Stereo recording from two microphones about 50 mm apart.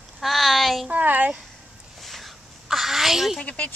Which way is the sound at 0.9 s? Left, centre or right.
Right.